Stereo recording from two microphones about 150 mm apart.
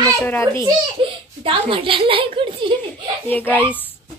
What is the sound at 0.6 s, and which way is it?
A child's voice, 35° right (ahead or behind).